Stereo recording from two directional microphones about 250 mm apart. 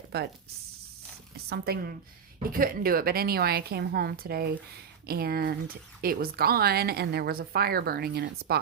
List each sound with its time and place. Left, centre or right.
0.1 s speech: right
1.5 s speech: right